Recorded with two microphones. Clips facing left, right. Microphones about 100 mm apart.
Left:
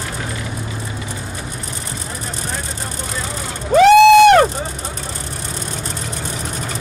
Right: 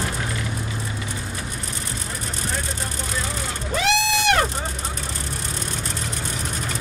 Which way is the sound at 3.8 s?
50° left (ahead or behind).